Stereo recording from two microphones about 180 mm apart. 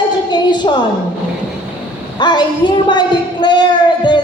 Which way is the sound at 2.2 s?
25° left (ahead or behind).